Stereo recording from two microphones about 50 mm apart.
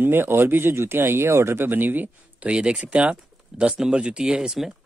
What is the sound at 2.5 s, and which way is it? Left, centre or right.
Speech, right.